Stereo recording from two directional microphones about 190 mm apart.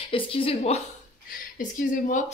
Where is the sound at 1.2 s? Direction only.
45° left (ahead or behind).